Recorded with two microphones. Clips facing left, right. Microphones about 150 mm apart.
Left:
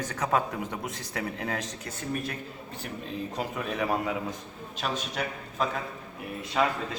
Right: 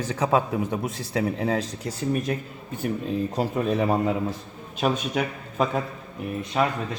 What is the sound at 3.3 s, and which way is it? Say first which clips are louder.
A man's voice: right 7 dB; 35° right (ahead or behind).